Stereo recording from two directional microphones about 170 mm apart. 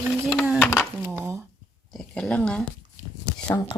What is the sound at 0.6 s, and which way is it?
Speech, 5° left (ahead or behind).